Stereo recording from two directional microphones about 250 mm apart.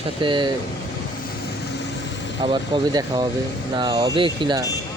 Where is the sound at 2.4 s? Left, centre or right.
Centre.